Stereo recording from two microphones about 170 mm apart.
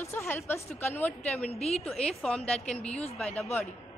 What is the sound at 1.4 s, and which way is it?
Speech, 40° left (ahead or behind).